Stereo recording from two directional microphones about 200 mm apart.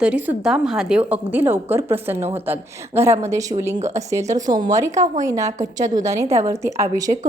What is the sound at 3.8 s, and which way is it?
A woman's voice, 15° right (ahead or behind).